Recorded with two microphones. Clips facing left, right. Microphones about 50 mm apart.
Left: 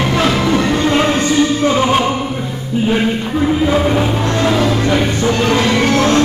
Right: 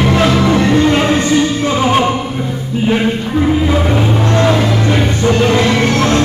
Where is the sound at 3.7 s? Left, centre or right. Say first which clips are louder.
Even; centre.